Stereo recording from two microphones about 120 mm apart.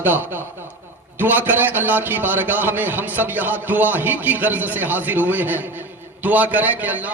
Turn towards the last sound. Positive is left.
turn(degrees=-15)  # may be behind; listen again after turning